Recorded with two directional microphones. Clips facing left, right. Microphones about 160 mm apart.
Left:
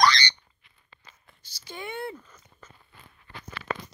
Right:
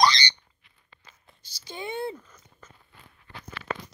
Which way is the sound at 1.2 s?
20° right (ahead or behind).